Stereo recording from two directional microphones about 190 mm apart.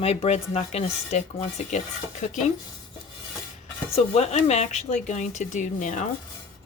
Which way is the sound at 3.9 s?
35° left (ahead or behind).